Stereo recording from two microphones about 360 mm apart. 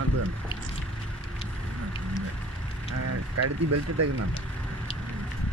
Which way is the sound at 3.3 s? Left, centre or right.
Right.